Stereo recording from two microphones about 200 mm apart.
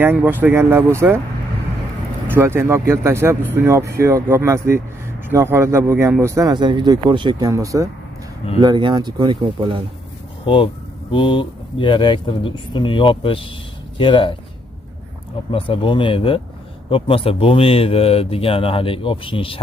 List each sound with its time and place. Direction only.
0.0 s speech: 10° right (ahead or behind)
2.3 s speech: 10° right (ahead or behind)
10.4 s speech: 25° left (ahead or behind)
15.5 s speech: 25° left (ahead or behind)